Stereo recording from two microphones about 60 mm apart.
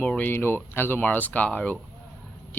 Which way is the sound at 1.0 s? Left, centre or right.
Left.